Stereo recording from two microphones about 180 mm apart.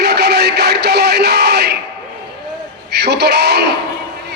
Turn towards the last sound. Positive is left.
turn(degrees=-65)  # may be behind; listen again after turning